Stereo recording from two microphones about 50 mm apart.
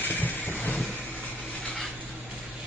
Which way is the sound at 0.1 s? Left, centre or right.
Left.